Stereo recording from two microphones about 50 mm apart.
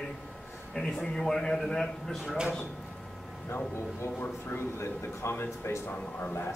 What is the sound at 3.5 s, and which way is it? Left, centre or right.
Speech, left.